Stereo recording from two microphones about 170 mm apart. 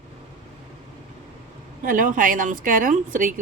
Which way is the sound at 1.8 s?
50° right (ahead or behind).